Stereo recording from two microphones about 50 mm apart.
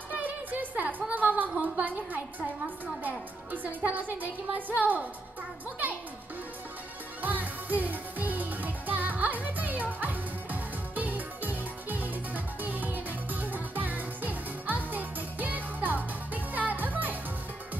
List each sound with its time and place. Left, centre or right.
0.1 s music: right
0.8 s a sound: right
1.6 s a woman's voice: right
7.2 s music: right